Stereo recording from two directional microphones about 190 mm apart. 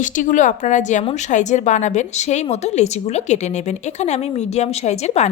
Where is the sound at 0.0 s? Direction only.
40° left (ahead or behind).